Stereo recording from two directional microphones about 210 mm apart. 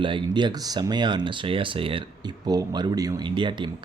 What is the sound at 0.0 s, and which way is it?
Speech, 20° right (ahead or behind).